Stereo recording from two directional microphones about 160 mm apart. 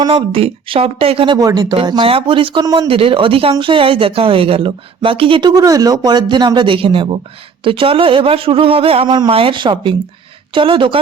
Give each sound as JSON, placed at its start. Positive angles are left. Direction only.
{"t": 0.0, "sound": "speech", "side_deg": -35}